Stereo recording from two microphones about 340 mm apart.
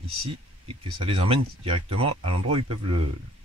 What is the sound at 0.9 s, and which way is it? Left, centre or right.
Speech, centre.